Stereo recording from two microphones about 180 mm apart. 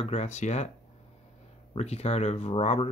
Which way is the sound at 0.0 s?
35° left (ahead or behind).